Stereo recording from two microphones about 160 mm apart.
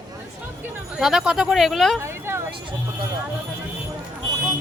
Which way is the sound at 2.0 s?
15° right (ahead or behind).